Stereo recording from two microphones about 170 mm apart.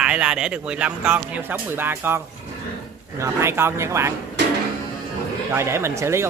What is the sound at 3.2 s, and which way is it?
Speech, 15° right (ahead or behind).